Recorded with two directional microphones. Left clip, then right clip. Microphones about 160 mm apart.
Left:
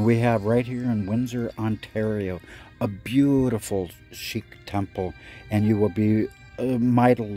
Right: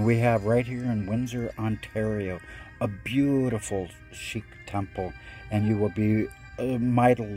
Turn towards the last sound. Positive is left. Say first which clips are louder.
# left 2 dB
turn(degrees=20)  # may be behind; listen again after turning